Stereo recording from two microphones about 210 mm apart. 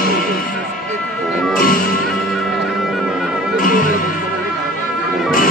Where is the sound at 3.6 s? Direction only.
40° left (ahead or behind).